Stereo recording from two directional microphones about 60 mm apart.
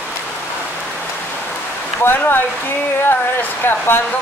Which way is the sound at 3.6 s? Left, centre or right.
Left.